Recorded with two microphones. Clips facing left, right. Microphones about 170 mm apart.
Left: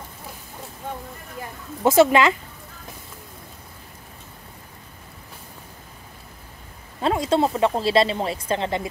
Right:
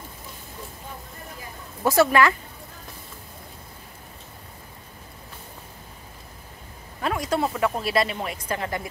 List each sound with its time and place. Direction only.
1.8 s speech: 20° left (ahead or behind)
7.0 s speech: 25° left (ahead or behind)